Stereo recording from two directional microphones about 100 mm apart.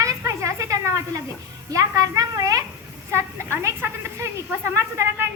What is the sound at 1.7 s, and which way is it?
Speech, 35° right (ahead or behind).